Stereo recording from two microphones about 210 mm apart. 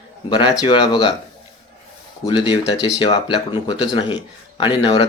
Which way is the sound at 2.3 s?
20° left (ahead or behind).